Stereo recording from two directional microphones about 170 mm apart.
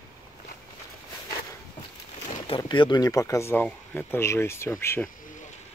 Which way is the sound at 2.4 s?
30° left (ahead or behind).